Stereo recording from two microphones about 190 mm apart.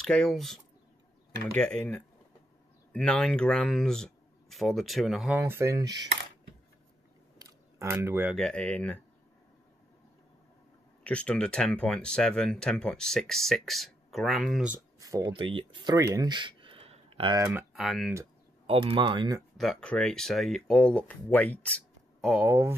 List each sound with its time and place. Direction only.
0.0 s speech: 5° left (ahead or behind)
5.4 s speech: 15° right (ahead or behind)
7.3 s a sound: 15° right (ahead or behind)
8.4 s speech: 5° left (ahead or behind)
11.1 s speech: 5° left (ahead or behind)
15.0 s speech: 20° right (ahead or behind)
17.4 s speech: 15° right (ahead or behind)
17.7 s speech: centre (ahead or behind)
18.7 s speech: 30° right (ahead or behind)
19.5 s speech: centre (ahead or behind)
22.4 s speech: 15° right (ahead or behind)